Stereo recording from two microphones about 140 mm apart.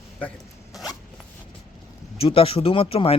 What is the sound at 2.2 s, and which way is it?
Speech, 40° left (ahead or behind).